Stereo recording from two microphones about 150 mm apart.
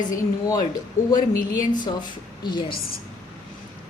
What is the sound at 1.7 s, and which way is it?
A woman's voice, 30° left (ahead or behind).